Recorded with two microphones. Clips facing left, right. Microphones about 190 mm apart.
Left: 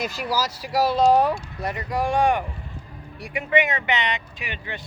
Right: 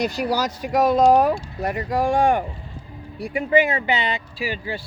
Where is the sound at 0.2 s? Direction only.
40° right (ahead or behind).